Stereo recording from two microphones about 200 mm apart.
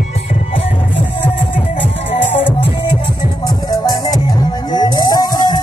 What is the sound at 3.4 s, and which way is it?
Music, 20° left (ahead or behind).